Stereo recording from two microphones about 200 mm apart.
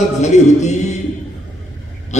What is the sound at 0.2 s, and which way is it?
Speech, 35° left (ahead or behind).